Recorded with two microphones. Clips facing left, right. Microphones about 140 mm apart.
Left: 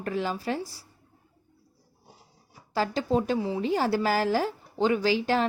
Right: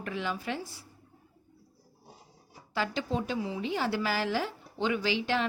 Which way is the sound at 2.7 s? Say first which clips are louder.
Left 6 dB; 40° left (ahead or behind).